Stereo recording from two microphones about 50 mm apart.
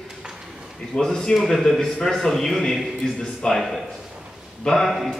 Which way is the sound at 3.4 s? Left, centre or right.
Centre.